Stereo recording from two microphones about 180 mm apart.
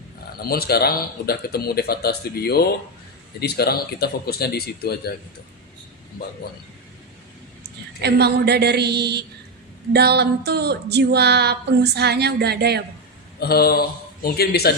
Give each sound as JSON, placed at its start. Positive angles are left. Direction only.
{"t": 0.4, "sound": "a man's voice", "side_deg": 60}
{"t": 7.6, "sound": "a sound", "side_deg": -65}
{"t": 13.4, "sound": "a man's voice", "side_deg": 60}